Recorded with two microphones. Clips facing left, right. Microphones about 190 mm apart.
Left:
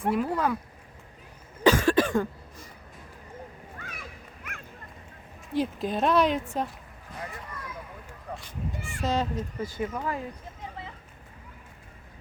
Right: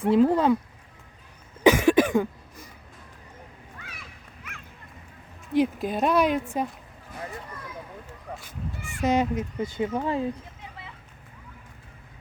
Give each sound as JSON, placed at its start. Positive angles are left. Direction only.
{"t": 0.1, "sound": "speech", "side_deg": -25}
{"t": 1.6, "sound": "cough", "side_deg": -20}
{"t": 3.8, "sound": "a sound", "side_deg": 45}
{"t": 5.5, "sound": "speech", "side_deg": -10}
{"t": 9.0, "sound": "speech", "side_deg": -20}